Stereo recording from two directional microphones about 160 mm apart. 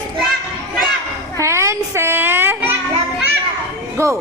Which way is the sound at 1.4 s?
15° right (ahead or behind).